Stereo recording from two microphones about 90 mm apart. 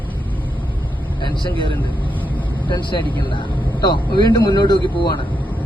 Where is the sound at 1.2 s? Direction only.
60° left (ahead or behind).